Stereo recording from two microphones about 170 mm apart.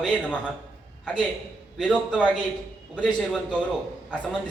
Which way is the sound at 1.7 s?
5° left (ahead or behind).